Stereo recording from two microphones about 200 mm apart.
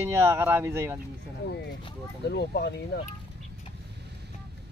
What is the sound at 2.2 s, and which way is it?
Speech, 55° left (ahead or behind).